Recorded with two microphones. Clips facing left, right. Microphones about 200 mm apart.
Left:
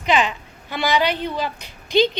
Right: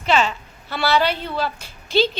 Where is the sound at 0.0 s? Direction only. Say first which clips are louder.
Even; 15° left (ahead or behind).